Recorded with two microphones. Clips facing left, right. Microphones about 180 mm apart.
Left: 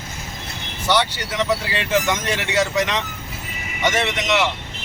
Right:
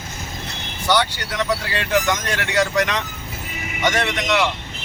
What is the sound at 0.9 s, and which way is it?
Speech, 5° left (ahead or behind).